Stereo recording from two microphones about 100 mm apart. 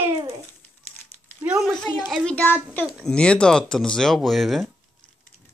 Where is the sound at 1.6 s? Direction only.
5° left (ahead or behind).